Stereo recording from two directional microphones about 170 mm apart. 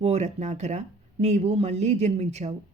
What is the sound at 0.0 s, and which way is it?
Speech, 40° right (ahead or behind).